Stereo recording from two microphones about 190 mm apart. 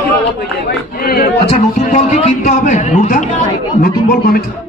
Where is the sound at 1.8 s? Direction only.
40° left (ahead or behind).